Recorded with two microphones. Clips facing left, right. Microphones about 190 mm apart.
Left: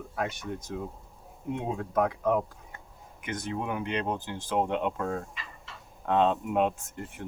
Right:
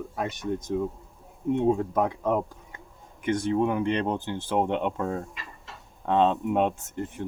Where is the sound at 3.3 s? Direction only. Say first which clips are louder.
Right 9 dB; 30° right (ahead or behind).